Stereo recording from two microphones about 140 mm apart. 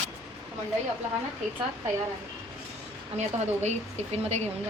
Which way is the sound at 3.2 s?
55° right (ahead or behind).